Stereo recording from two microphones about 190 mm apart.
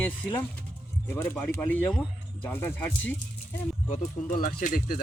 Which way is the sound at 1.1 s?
10° left (ahead or behind).